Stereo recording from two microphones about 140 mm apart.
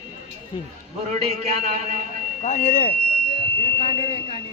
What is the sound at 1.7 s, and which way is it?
Speech, 55° right (ahead or behind).